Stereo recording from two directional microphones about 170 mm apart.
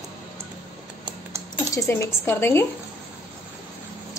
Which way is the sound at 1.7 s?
15° left (ahead or behind).